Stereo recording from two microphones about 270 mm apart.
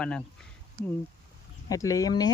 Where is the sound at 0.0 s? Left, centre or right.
Centre.